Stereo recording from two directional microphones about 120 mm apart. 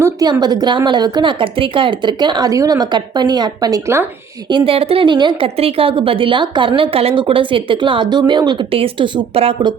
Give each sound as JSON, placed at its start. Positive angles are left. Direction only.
{"t": 0.0, "sound": "speech", "side_deg": -35}
{"t": 4.4, "sound": "speech", "side_deg": -45}
{"t": 5.5, "sound": "speech", "side_deg": -55}